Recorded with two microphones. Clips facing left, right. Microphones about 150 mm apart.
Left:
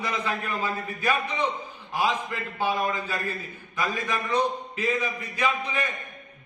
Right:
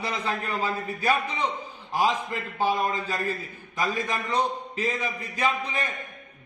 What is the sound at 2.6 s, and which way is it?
A man's voice, 35° right (ahead or behind).